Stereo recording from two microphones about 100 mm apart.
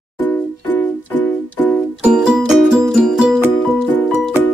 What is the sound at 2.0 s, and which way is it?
Music, 5° right (ahead or behind).